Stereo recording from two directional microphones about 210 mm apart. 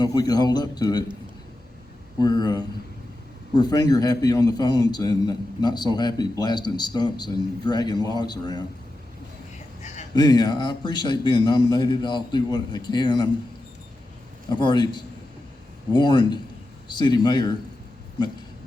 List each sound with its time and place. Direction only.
0.0 s a man's voice: 20° left (ahead or behind)
2.1 s a man's voice: 20° left (ahead or behind)
9.8 s a sound: 35° left (ahead or behind)
10.2 s a man's voice: 20° left (ahead or behind)
14.5 s a man's voice: 20° left (ahead or behind)